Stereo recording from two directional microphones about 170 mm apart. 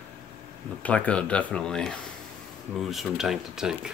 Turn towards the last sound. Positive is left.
turn(degrees=-5)  # may be behind; listen again after turning